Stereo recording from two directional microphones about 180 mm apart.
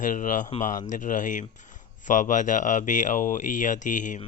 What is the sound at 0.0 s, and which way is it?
Speech, 45° left (ahead or behind).